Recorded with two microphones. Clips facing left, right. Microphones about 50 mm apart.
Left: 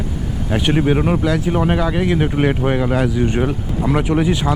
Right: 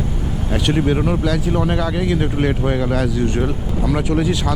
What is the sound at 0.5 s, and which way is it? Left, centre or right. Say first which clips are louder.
Speech: left 2 dB; centre.